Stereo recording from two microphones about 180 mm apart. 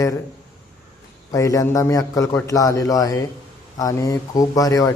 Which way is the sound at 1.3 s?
15° left (ahead or behind).